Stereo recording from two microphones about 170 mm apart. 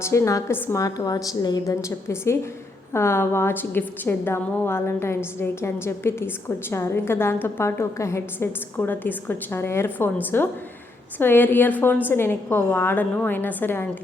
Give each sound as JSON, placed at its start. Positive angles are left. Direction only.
{"t": 0.0, "sound": "a woman's voice", "side_deg": 15}